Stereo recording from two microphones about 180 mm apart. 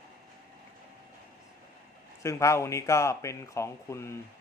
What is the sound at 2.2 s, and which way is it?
Speech, 15° left (ahead or behind).